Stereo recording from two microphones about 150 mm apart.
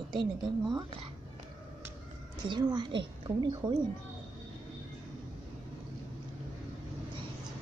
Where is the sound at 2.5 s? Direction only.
30° right (ahead or behind).